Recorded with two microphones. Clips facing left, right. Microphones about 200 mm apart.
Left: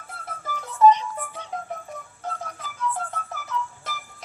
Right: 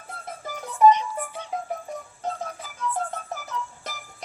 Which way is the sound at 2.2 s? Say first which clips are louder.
Right 2 dB; 25° right (ahead or behind).